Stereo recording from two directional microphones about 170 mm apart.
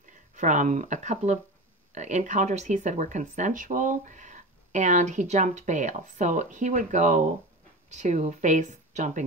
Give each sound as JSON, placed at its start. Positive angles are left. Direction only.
{"t": 0.4, "sound": "speech", "side_deg": -45}